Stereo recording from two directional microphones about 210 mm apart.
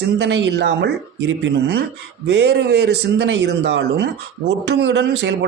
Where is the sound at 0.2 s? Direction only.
55° right (ahead or behind).